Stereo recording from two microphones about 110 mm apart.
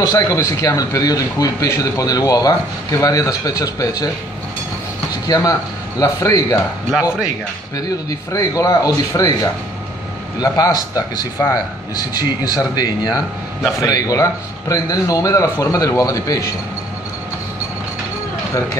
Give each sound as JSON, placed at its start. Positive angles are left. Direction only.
{"t": 0.0, "sound": "speech", "side_deg": 35}
{"t": 5.2, "sound": "speech", "side_deg": 35}
{"t": 6.9, "sound": "speech", "side_deg": -5}
{"t": 7.7, "sound": "speech", "side_deg": 30}
{"t": 12.4, "sound": "speech", "side_deg": 35}